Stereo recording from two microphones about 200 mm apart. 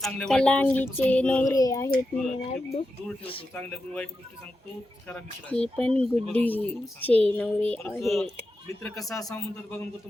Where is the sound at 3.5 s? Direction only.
5° left (ahead or behind).